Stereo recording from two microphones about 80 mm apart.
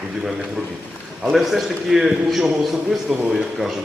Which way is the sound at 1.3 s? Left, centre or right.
Centre.